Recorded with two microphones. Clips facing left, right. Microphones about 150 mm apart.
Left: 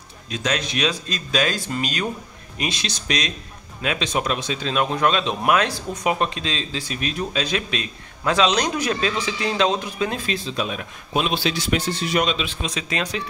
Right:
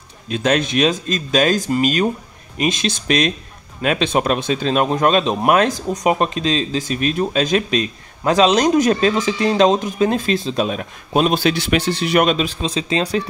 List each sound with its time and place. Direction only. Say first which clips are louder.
0.3 s speech: right 7 dB; 55° right (ahead or behind)
12.4 s speech: right 7 dB; 30° right (ahead or behind)